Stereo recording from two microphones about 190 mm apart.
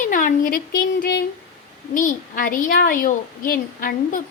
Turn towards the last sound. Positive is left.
turn(degrees=45)  # may be behind; listen again after turning